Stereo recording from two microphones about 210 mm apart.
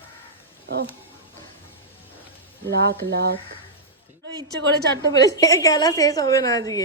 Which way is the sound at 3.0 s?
50° right (ahead or behind).